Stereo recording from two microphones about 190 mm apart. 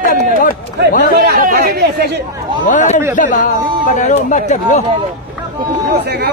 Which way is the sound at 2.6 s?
40° left (ahead or behind).